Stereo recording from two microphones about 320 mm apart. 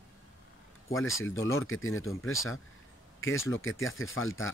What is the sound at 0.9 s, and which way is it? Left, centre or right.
Speech, left.